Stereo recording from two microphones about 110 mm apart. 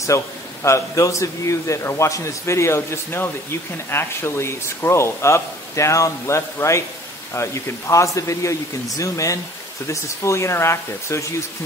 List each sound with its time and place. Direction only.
0.1 s a man's voice: 30° left (ahead or behind)